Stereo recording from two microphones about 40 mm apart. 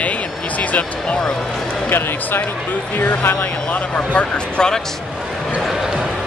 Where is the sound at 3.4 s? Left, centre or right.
Left.